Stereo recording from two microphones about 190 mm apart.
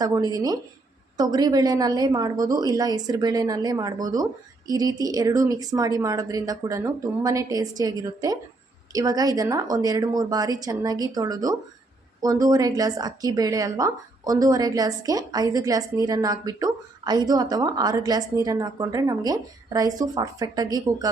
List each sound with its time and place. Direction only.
0.0 s speech: 20° right (ahead or behind)